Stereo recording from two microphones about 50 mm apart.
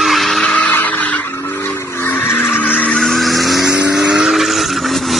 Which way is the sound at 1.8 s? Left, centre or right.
Left.